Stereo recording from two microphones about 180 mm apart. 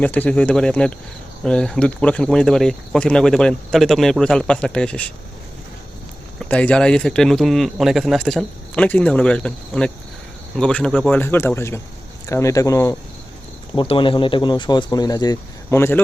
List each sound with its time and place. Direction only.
0.0 s speech: 10° left (ahead or behind)
6.4 s speech: 5° left (ahead or behind)
13.7 s speech: 30° left (ahead or behind)